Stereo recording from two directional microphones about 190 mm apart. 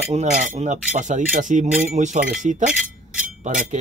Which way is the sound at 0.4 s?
40° right (ahead or behind).